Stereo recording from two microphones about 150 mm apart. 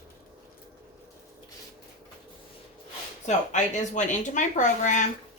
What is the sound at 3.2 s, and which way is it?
Speech, 55° left (ahead or behind).